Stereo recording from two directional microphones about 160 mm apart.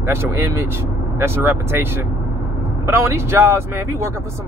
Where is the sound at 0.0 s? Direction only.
15° right (ahead or behind).